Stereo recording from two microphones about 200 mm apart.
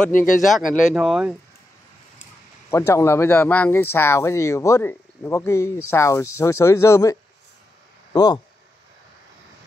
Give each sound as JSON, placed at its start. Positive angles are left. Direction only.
{"t": 0.1, "sound": "speech", "side_deg": 40}
{"t": 0.4, "sound": "speech", "side_deg": 0}
{"t": 2.7, "sound": "speech", "side_deg": 15}